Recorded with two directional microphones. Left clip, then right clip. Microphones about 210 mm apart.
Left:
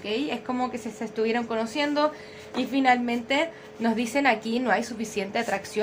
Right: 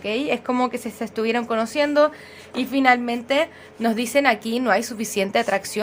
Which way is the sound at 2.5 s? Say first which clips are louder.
Right 4 dB; 40° right (ahead or behind).